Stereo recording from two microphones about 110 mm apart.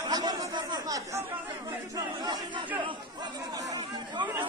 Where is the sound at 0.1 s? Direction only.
40° right (ahead or behind).